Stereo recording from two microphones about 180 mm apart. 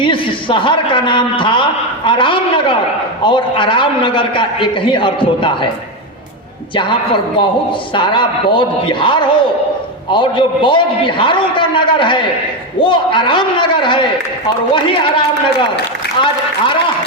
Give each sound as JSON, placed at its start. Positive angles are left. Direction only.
{"t": 0.0, "sound": "a man's voice", "side_deg": 30}
{"t": 6.7, "sound": "a man's voice", "side_deg": 30}